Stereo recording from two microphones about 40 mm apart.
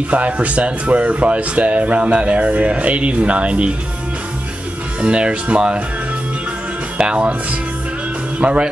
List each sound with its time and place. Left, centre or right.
0.1 s speech: right
5.0 s speech: right
7.0 s speech: right
8.4 s speech: right